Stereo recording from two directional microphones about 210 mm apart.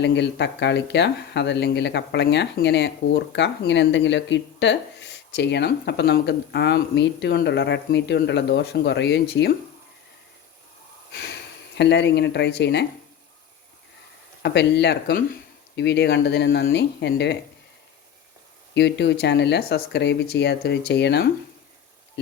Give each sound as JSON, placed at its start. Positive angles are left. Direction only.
{"t": 0.0, "sound": "speech", "side_deg": 55}
{"t": 11.1, "sound": "snort", "side_deg": 55}
{"t": 11.8, "sound": "speech", "side_deg": 55}
{"t": 14.4, "sound": "speech", "side_deg": 55}
{"t": 18.7, "sound": "speech", "side_deg": 55}